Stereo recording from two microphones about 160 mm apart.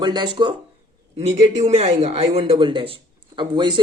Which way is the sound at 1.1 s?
45° right (ahead or behind).